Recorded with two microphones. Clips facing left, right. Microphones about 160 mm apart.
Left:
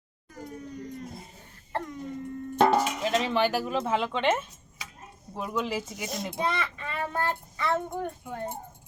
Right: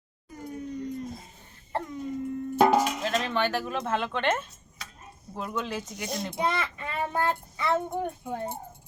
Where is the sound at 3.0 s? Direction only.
10° left (ahead or behind).